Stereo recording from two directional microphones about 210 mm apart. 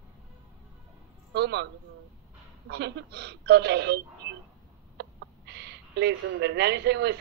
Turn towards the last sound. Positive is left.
turn(degrees=-55)  # may be behind; listen again after turning